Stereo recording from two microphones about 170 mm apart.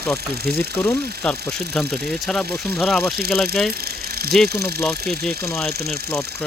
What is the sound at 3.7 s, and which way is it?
Speech, 65° right (ahead or behind).